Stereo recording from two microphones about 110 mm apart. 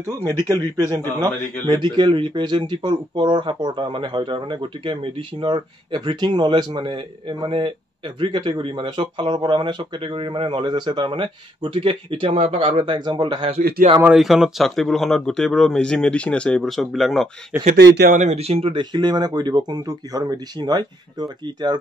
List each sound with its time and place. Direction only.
0.5 s speech: 40° right (ahead or behind)
12.3 s speech: 65° right (ahead or behind); by 13.6 s 50° right (ahead or behind)
14.0 s speech: 5° right (ahead or behind)
17.5 s speech: 20° right (ahead or behind)
18.2 s speech: 80° right; by 18.8 s 65° right (ahead or behind)
18.8 s speech: 40° right (ahead or behind)